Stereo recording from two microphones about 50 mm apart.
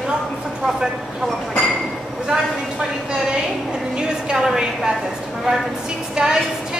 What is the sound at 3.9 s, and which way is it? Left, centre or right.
A woman's voice, centre.